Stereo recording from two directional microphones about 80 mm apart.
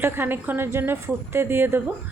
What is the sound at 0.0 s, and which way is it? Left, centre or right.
Speech, right.